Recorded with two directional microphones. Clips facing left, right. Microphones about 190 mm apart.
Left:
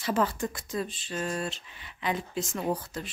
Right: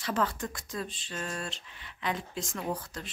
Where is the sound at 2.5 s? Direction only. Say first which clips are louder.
Left 4 dB; 25° left (ahead or behind).